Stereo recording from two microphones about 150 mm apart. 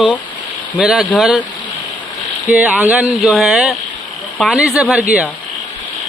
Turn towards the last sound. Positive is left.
turn(degrees=-5)  # may be behind; listen again after turning